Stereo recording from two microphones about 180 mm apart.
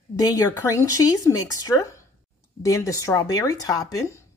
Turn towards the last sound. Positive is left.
turn(degrees=20)  # may be behind; listen again after turning